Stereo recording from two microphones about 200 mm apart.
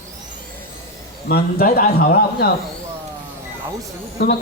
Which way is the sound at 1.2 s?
50° left (ahead or behind).